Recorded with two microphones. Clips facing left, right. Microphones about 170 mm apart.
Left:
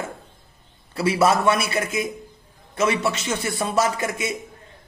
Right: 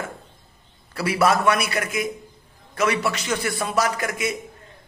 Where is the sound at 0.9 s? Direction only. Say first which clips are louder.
Left 1 dB; 25° left (ahead or behind).